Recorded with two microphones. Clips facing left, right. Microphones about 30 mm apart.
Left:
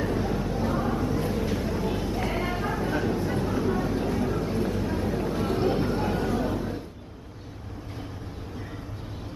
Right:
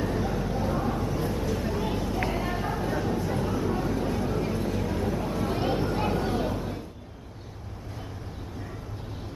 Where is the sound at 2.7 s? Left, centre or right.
Left.